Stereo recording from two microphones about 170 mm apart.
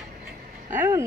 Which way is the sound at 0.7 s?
15° right (ahead or behind).